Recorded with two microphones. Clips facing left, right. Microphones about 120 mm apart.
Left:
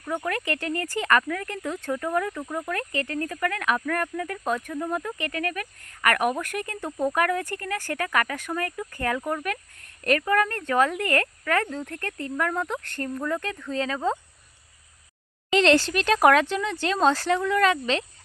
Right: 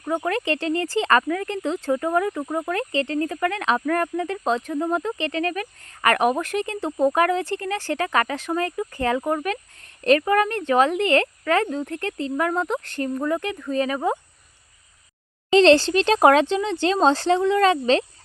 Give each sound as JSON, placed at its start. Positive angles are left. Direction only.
{"t": 0.1, "sound": "speech", "side_deg": -25}
{"t": 15.4, "sound": "speech", "side_deg": -30}